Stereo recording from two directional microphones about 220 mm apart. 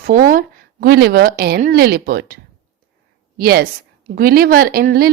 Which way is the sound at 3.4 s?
45° right (ahead or behind).